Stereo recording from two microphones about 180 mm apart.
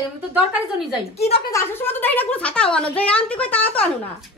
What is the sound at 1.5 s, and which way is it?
A woman's voice, 10° left (ahead or behind).